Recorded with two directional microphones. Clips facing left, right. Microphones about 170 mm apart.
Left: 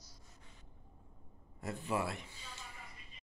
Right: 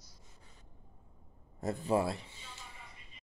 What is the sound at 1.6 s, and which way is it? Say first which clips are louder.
Speech: right 6 dB; 35° right (ahead or behind).